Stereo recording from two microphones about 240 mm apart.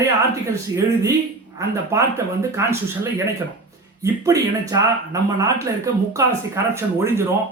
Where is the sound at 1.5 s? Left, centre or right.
Centre.